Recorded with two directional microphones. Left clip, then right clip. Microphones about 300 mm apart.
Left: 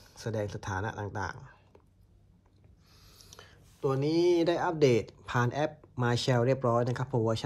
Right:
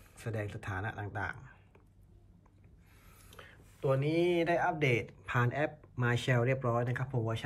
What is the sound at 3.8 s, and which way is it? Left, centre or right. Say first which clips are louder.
Speech: left 3 dB; centre.